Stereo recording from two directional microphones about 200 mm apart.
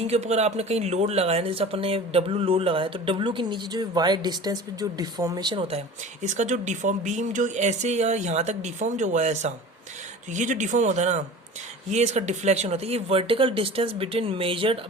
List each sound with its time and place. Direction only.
0.0 s speech: 30° right (ahead or behind)